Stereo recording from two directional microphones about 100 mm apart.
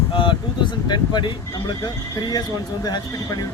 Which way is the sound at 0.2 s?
55° left (ahead or behind).